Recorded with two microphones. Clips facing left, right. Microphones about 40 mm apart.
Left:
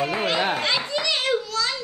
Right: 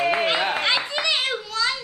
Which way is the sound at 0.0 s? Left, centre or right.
Right.